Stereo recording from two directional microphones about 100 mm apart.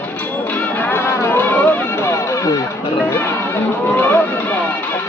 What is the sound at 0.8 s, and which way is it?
Music, 20° left (ahead or behind).